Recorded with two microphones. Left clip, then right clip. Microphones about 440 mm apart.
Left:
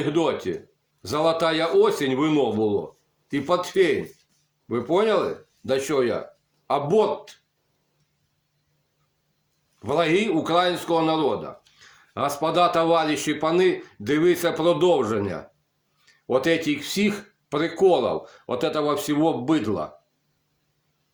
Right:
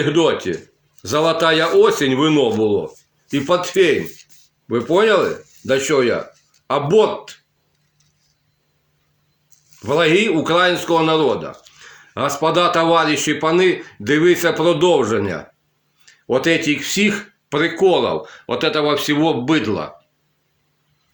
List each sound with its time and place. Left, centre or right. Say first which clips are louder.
0.0 s speech: right 7 dB; left
9.8 s speech: right 7 dB; left